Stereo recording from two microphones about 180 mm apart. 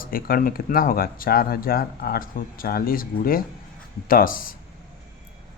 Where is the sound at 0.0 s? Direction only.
55° left (ahead or behind).